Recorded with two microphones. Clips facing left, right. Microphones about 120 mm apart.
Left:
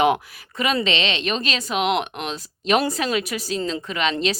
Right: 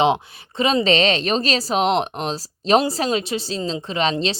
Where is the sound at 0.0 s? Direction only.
25° right (ahead or behind).